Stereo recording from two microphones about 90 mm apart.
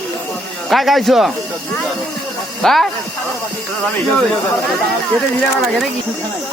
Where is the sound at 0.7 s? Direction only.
Centre (ahead or behind).